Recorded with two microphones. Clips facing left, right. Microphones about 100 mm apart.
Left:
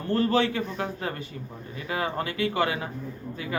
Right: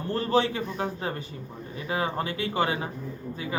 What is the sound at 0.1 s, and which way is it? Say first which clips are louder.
A man's voice: left 1 dB; 25° right (ahead or behind).